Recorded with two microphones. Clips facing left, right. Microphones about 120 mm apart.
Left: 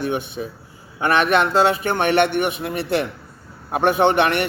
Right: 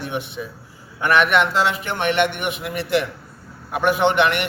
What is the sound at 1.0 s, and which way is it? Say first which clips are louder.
Speech: right 1 dB; 30° left (ahead or behind).